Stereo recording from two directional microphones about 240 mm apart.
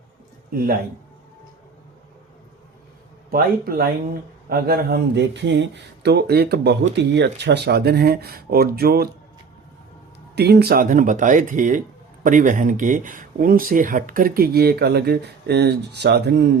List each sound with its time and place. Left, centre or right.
0.5 s speech: right
3.3 s speech: right
10.3 s speech: right